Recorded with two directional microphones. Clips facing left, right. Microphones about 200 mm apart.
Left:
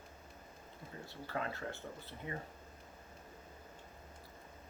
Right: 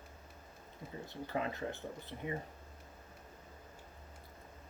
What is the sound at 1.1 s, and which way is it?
Speech, 20° right (ahead or behind).